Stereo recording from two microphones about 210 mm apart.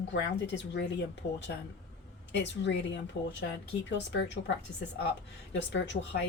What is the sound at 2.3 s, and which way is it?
Speech, 55° left (ahead or behind).